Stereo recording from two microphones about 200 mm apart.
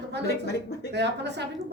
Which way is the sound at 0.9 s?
60° right (ahead or behind).